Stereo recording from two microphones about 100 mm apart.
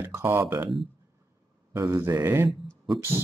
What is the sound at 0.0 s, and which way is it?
Speech, 25° right (ahead or behind).